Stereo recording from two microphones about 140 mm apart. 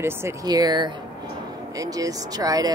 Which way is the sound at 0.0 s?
25° right (ahead or behind).